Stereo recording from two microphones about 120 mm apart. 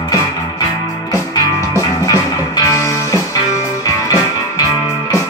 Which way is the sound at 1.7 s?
25° left (ahead or behind).